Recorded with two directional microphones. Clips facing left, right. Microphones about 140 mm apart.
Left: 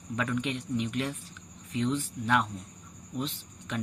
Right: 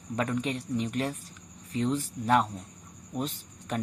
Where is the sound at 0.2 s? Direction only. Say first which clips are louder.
Right 1 dB; 35° right (ahead or behind).